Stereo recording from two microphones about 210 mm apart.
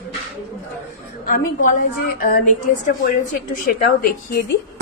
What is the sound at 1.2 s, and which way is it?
A woman's voice, 40° left (ahead or behind).